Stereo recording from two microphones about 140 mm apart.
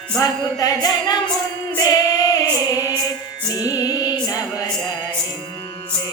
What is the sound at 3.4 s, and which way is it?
Music, 25° left (ahead or behind).